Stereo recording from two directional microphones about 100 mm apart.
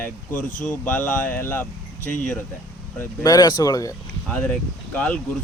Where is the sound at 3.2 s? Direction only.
40° left (ahead or behind).